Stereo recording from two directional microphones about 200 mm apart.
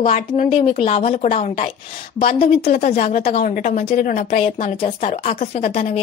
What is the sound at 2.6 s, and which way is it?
Speech, 45° left (ahead or behind).